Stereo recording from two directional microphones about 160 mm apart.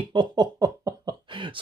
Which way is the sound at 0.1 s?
30° right (ahead or behind).